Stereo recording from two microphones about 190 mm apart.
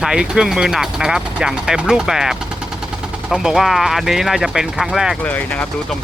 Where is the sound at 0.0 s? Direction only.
5° right (ahead or behind).